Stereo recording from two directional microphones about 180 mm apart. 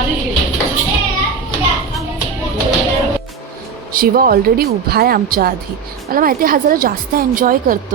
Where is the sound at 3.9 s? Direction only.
55° right (ahead or behind).